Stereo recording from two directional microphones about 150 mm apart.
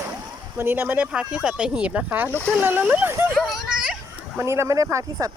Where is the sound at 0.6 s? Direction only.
15° right (ahead or behind).